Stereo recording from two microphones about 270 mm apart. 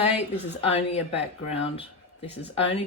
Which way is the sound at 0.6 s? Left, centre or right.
Left.